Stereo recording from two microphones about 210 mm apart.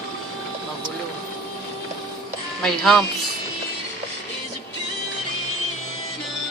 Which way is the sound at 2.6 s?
Centre (ahead or behind).